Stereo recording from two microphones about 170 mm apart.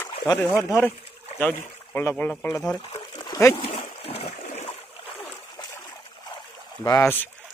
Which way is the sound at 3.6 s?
35° left (ahead or behind).